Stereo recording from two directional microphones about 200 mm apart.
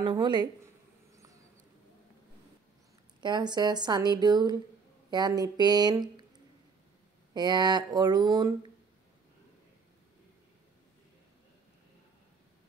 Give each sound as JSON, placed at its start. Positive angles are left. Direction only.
{"t": 0.2, "sound": "a woman's voice", "side_deg": -20}
{"t": 3.2, "sound": "a woman's voice", "side_deg": -20}
{"t": 7.3, "sound": "a woman's voice", "side_deg": -20}